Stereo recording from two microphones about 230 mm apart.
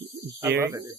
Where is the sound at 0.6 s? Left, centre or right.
Centre.